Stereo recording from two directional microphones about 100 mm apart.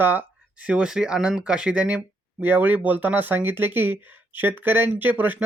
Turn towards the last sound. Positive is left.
turn(degrees=-20)  # may be behind; listen again after turning